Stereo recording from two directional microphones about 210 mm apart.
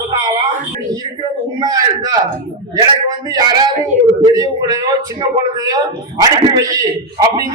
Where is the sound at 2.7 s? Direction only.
20° right (ahead or behind).